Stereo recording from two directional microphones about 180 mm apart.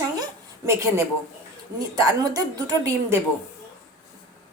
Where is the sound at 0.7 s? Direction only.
15° right (ahead or behind).